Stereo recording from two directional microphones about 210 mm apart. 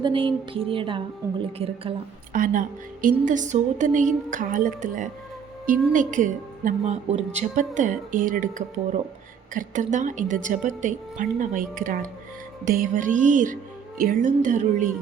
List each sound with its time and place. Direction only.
0.0 s music: 25° right (ahead or behind)
2.3 s a woman's voice: 40° right (ahead or behind)